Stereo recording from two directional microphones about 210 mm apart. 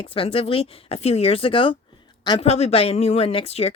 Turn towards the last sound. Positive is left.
turn(degrees=30)  # may be behind; listen again after turning